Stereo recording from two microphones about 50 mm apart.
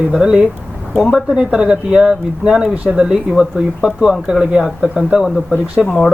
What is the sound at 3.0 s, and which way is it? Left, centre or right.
Speech, centre.